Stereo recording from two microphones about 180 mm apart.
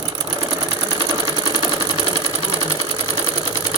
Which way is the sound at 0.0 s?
20° right (ahead or behind).